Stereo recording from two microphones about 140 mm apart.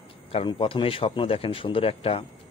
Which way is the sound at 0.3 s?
40° left (ahead or behind).